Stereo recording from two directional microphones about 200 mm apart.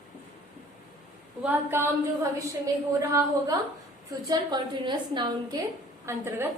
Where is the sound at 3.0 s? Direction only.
15° right (ahead or behind).